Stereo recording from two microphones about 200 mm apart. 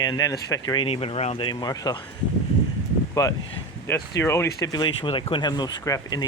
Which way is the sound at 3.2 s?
15° left (ahead or behind).